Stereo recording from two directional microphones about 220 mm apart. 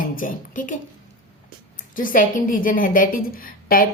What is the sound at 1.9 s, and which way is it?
A woman's voice, 40° left (ahead or behind).